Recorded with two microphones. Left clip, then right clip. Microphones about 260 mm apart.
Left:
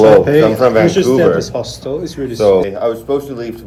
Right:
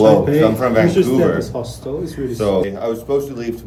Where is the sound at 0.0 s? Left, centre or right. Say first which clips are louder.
Left 5 dB; left.